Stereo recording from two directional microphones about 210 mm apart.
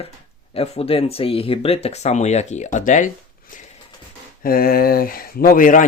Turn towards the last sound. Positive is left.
turn(degrees=40)  # may be behind; listen again after turning